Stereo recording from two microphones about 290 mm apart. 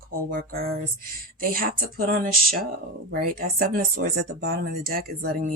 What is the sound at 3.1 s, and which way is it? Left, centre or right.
Speech, right.